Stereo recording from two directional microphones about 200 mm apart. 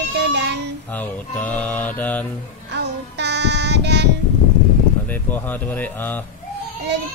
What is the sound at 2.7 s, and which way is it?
Music, 60° right (ahead or behind).